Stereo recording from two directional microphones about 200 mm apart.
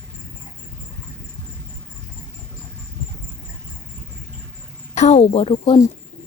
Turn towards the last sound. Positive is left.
turn(degrees=25)  # may be behind; listen again after turning